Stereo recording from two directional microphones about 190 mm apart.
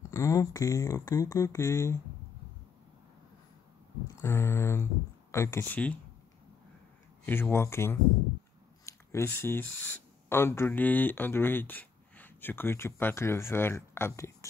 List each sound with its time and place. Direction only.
0.1 s speech: 15° left (ahead or behind)
4.2 s speech: 15° left (ahead or behind)
7.2 s speech: 10° left (ahead or behind)